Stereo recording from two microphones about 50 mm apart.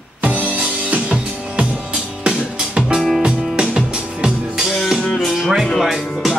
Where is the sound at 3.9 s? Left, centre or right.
Centre.